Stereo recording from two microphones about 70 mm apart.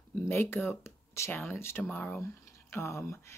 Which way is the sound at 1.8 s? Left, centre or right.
Left.